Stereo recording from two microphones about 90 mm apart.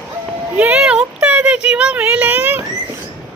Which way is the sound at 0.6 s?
15° right (ahead or behind).